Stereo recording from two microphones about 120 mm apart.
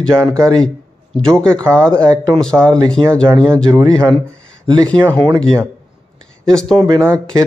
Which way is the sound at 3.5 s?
25° right (ahead or behind).